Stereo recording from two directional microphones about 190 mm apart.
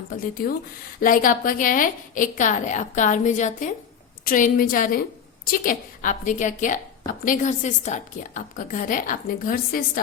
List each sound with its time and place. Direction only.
0.1 s a woman's voice: 45° left (ahead or behind)